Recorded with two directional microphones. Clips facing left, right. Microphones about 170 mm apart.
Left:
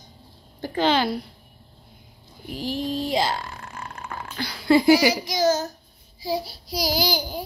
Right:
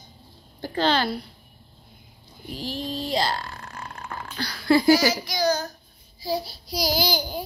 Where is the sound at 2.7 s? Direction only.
15° left (ahead or behind).